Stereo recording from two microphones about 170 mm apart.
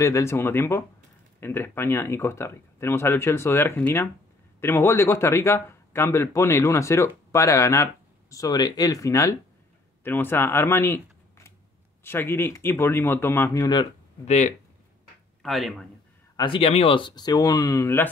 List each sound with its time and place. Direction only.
0.0 s speech: 15° left (ahead or behind)
14.2 s speech: 40° left (ahead or behind)
15.4 s speech: centre (ahead or behind)
16.3 s speech: 30° left (ahead or behind); by 18.1 s 15° left (ahead or behind)